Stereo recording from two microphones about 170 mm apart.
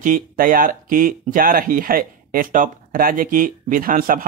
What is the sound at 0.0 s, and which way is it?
Speech, 55° right (ahead or behind).